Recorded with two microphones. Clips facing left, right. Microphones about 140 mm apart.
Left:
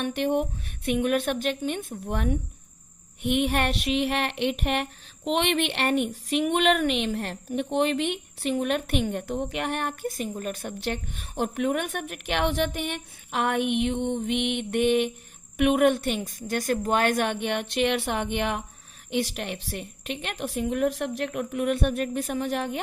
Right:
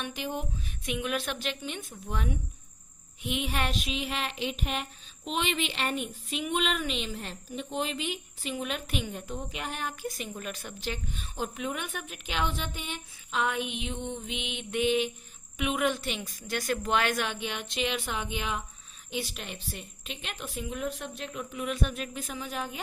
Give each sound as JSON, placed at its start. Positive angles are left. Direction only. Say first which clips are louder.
{"t": 0.0, "sound": "a woman's voice", "louder": "left 10 dB", "side_deg": 60}
{"t": 10.3, "sound": "a woman's voice", "louder": "left 7 dB", "side_deg": 45}